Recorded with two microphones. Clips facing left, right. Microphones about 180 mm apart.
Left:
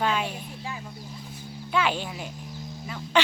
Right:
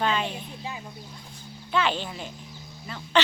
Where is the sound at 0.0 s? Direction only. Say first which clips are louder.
Even; 10° left (ahead or behind).